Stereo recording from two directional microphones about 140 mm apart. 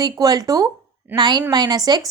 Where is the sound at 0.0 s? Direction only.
25° right (ahead or behind).